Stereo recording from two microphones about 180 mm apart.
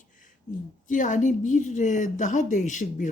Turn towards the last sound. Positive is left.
turn(degrees=45)  # may be behind; listen again after turning